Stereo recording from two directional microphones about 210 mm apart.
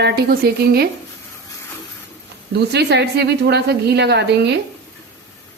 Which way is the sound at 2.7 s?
55° right (ahead or behind).